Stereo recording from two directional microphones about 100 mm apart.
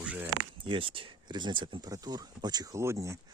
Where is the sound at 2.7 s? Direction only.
30° right (ahead or behind).